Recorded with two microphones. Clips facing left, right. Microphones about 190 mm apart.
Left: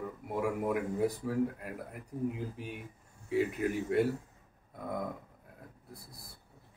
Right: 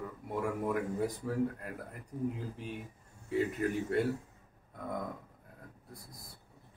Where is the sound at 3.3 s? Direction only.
5° left (ahead or behind).